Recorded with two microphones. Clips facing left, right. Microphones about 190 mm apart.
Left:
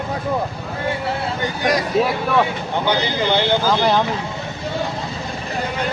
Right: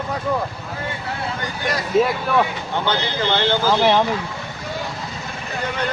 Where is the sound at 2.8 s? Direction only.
15° left (ahead or behind).